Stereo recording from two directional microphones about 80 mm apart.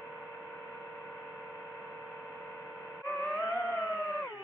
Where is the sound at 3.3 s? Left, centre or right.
Left.